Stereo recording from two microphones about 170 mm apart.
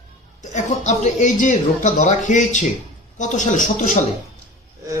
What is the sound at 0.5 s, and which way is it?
Speech, 45° left (ahead or behind).